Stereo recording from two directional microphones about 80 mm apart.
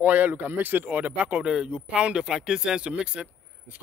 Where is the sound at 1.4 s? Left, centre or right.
Centre.